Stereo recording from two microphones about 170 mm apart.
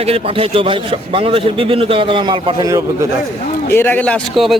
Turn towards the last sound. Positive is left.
turn(degrees=5)  # may be behind; listen again after turning